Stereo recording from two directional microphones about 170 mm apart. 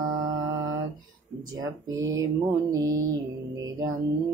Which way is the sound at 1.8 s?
20° right (ahead or behind).